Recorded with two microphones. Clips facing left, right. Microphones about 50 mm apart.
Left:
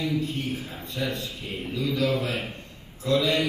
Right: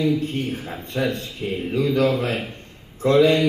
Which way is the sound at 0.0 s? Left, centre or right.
Right.